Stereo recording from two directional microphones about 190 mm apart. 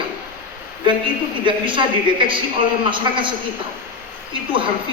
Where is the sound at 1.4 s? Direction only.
25° right (ahead or behind).